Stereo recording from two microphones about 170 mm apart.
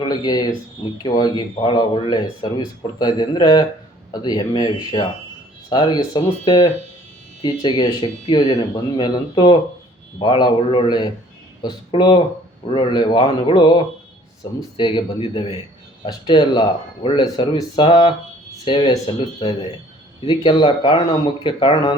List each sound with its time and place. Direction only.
0.0 s speech: 25° left (ahead or behind)
14.8 s speech: 30° left (ahead or behind)